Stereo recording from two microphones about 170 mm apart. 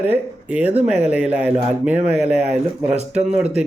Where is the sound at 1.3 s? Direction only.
10° right (ahead or behind).